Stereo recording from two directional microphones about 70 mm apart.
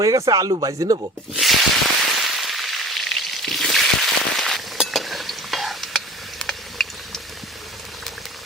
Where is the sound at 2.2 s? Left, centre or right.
Centre.